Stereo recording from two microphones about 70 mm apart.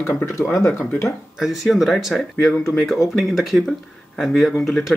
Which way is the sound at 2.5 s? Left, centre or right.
Left.